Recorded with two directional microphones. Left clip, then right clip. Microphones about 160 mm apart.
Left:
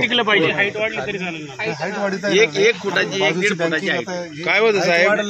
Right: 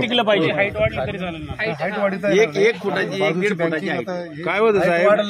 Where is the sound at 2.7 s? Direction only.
90° right.